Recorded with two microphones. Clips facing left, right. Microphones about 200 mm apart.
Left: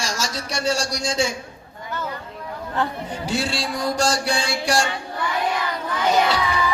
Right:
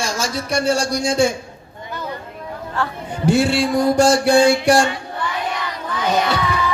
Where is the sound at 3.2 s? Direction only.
55° right (ahead or behind).